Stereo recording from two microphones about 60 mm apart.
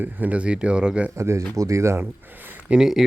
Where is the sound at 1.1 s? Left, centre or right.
Right.